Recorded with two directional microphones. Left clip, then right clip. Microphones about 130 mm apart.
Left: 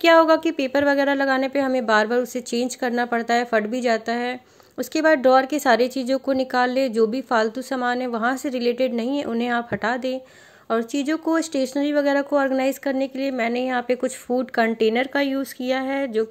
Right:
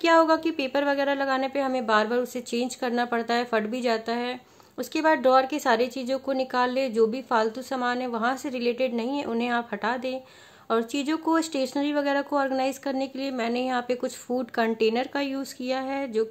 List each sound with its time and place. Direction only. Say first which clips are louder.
0.0 s speech: left 5 dB; 25° left (ahead or behind)
10.7 s a woman's voice: left 3 dB; 20° left (ahead or behind)